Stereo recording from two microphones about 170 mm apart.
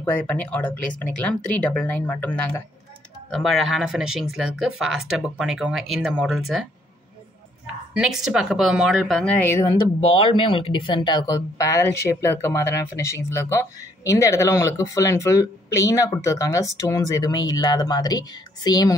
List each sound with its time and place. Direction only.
0.0 s speech: 10° left (ahead or behind)
7.9 s speech: 5° right (ahead or behind)
9.4 s speech: 15° left (ahead or behind)
9.9 s speech: 30° left (ahead or behind)